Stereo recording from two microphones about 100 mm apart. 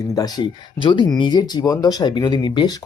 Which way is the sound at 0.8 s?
55° left (ahead or behind).